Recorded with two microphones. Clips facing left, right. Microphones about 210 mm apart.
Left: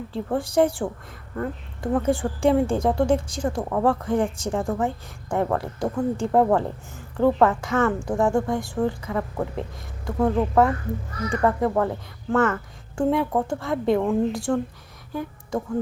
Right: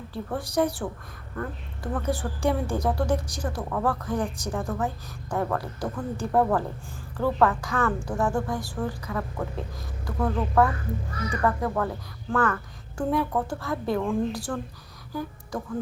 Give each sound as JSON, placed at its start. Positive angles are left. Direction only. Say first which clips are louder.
{"t": 0.1, "sound": "a woman's voice", "louder": "left 5 dB", "side_deg": 30}